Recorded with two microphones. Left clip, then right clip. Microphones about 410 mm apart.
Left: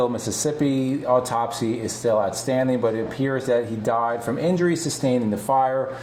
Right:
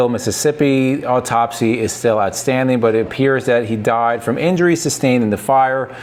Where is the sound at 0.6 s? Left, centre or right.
Right.